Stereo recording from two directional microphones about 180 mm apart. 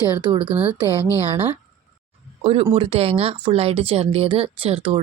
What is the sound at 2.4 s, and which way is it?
Speech, 35° right (ahead or behind).